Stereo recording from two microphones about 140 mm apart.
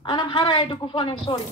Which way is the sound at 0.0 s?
35° left (ahead or behind).